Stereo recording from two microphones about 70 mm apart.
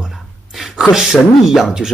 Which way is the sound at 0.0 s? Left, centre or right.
Centre.